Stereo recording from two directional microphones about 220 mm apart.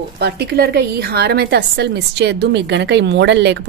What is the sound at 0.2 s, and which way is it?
A woman's voice, 45° right (ahead or behind).